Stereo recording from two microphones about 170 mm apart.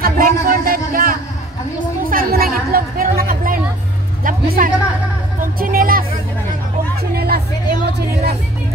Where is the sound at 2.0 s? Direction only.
60° right (ahead or behind).